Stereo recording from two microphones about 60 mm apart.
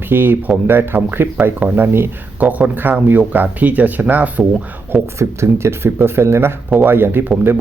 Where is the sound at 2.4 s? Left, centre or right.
Right.